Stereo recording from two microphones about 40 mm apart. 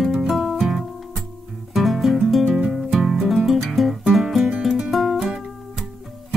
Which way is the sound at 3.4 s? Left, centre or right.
Centre.